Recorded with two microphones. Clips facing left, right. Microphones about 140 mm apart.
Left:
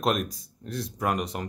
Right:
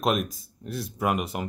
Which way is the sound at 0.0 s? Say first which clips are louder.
Right 1 dB; centre (ahead or behind).